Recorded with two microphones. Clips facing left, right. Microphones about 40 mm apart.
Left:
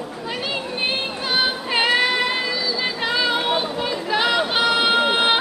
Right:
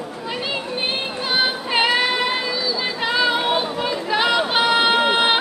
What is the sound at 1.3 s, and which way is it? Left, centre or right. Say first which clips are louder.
Female singing: right 1 dB; centre.